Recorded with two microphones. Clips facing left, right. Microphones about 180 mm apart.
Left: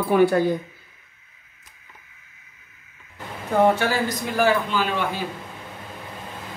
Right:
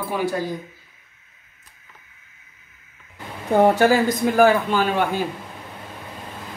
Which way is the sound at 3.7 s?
45° right (ahead or behind).